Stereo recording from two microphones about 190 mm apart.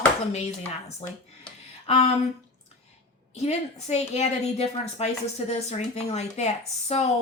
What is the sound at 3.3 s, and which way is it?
A woman's voice, 35° left (ahead or behind).